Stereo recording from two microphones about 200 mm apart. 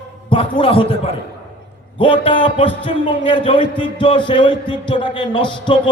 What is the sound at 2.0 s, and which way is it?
A man's voice, 25° left (ahead or behind).